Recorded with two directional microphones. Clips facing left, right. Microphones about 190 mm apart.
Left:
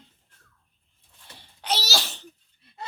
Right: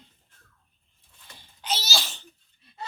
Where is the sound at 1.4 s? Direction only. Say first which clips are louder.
Left 3 dB; 70° left (ahead or behind).